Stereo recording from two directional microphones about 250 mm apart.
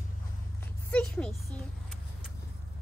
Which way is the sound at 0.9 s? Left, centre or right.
Centre.